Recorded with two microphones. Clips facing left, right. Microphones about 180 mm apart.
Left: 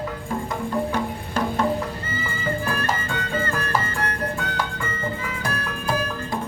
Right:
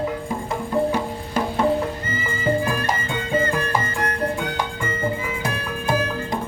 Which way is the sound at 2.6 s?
15° right (ahead or behind).